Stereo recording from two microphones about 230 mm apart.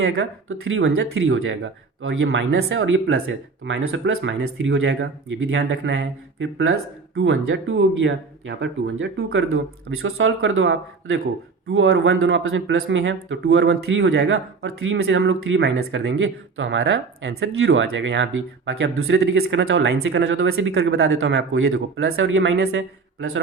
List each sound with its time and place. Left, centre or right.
0.0 s speech: right